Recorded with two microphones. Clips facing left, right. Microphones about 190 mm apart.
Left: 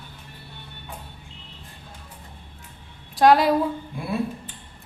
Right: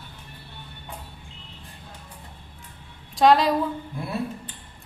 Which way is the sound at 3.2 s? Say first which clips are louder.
Left 1 dB; centre (ahead or behind).